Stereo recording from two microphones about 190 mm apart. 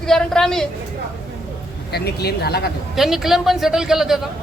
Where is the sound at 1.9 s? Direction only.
55° left (ahead or behind).